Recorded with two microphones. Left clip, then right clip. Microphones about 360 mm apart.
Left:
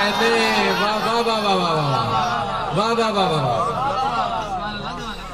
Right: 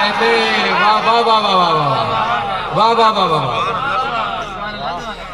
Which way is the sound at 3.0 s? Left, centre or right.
Left.